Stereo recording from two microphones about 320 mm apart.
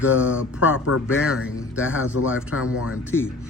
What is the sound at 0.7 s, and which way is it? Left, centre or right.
Speech, left.